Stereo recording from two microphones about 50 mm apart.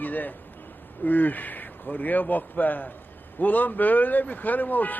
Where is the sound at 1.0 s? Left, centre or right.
Left.